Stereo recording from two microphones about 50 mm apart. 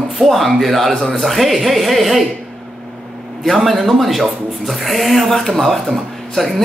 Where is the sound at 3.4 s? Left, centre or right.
Centre.